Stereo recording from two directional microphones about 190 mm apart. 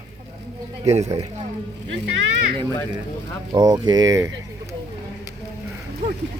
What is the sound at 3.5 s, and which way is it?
Speech, 20° right (ahead or behind).